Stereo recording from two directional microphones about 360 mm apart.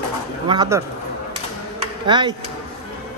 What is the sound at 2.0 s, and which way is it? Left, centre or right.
Speech, centre.